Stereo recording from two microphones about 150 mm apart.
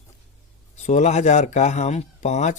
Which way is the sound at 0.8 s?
50° left (ahead or behind).